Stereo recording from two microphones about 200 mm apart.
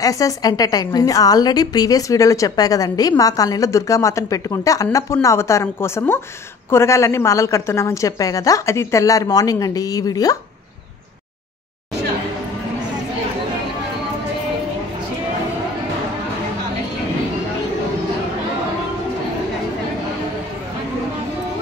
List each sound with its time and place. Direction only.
0.0 s a woman's voice: 15° left (ahead or behind)